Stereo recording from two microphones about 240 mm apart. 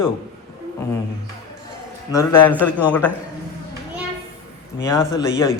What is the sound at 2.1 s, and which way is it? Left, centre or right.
Speech, centre.